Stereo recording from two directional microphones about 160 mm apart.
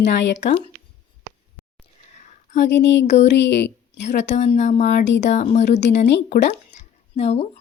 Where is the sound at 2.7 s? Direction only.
90° left.